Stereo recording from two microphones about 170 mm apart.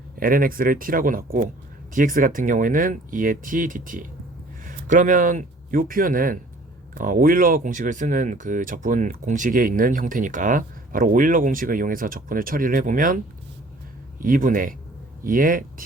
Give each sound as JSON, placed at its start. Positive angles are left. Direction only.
{"t": 0.2, "sound": "speech", "side_deg": -55}
{"t": 14.2, "sound": "speech", "side_deg": -55}